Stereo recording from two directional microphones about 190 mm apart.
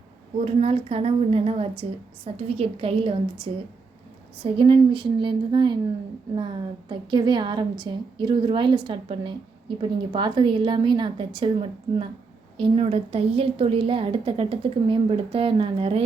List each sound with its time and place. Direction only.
0.4 s a woman's voice: 30° right (ahead or behind)